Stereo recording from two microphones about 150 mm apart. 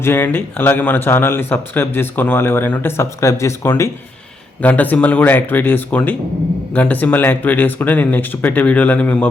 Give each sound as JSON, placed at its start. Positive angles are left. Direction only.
{"t": 0.0, "sound": "speech", "side_deg": 15}